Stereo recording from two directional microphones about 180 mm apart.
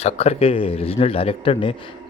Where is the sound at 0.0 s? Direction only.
35° left (ahead or behind).